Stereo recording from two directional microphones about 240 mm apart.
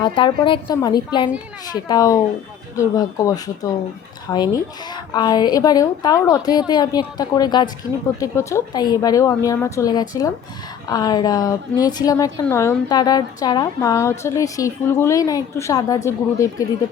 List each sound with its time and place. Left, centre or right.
0.0 s a woman's voice: centre